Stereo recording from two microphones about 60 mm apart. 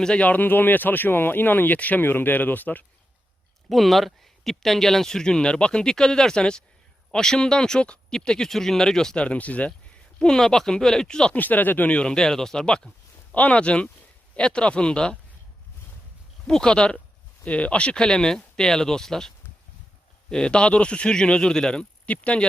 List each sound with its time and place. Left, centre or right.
0.0 s speech: centre
0.3 s speech: left
3.7 s speech: centre
9.2 s speech: left
10.2 s speech: centre
11.3 s speech: left
11.9 s speech: centre
16.5 s speech: centre
20.3 s speech: centre